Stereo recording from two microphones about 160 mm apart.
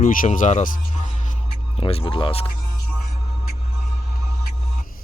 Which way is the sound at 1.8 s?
35° left (ahead or behind).